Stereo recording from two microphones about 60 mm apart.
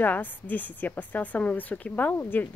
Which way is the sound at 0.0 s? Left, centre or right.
Left.